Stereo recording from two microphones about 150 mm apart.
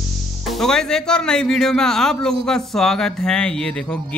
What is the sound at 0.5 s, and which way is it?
A man's voice, 5° left (ahead or behind).